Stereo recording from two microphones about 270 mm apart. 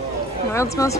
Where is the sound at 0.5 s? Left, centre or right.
Centre.